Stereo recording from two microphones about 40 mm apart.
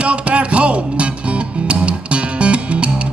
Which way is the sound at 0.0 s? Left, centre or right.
Right.